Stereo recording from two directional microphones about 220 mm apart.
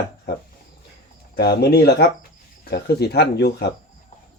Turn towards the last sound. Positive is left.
turn(degrees=45)  # may be behind; listen again after turning